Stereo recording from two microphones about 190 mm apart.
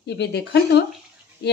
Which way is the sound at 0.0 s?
60° left (ahead or behind).